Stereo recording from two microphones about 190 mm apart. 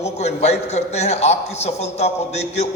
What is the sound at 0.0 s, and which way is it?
A man's voice, 35° left (ahead or behind).